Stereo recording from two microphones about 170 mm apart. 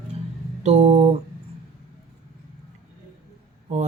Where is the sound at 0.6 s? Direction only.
40° right (ahead or behind).